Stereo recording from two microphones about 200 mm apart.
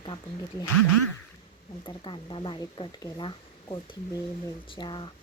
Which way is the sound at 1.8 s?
25° left (ahead or behind).